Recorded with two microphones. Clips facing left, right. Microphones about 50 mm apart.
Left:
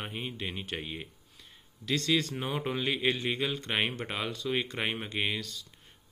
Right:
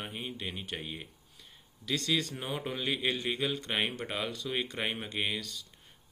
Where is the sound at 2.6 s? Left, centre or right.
Left.